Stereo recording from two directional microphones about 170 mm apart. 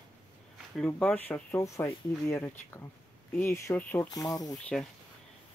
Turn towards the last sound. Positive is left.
turn(degrees=20)  # may be behind; listen again after turning